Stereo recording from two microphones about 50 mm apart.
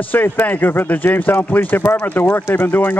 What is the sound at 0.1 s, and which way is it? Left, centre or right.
Speech, left.